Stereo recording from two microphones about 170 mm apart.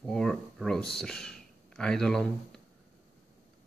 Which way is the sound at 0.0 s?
5° left (ahead or behind).